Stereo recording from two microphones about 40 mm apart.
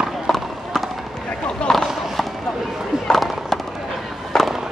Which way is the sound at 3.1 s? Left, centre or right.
Centre.